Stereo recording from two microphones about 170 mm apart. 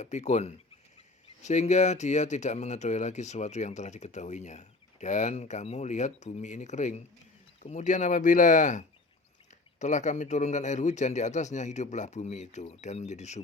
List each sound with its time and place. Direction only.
0.0 s speech: 45° left (ahead or behind)